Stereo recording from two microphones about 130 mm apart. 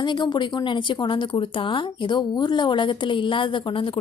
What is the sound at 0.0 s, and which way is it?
Speech, 35° left (ahead or behind).